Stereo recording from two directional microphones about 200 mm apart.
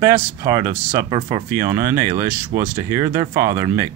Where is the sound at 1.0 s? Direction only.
20° right (ahead or behind).